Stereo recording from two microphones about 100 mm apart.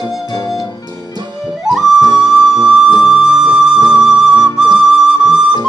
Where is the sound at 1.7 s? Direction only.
5° right (ahead or behind).